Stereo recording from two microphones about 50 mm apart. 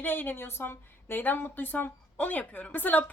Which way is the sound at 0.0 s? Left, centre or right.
Left.